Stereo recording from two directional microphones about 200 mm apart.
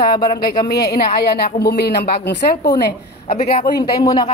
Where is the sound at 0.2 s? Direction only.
50° left (ahead or behind).